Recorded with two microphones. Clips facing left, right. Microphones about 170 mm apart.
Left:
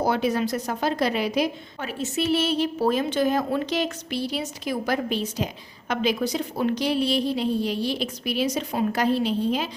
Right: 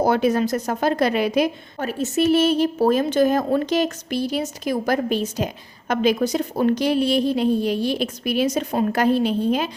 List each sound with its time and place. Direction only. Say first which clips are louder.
0.0 s a woman's voice: right 5 dB; 50° right (ahead or behind)